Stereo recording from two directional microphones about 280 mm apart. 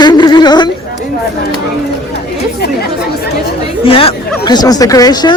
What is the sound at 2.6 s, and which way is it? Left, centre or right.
Speech, left.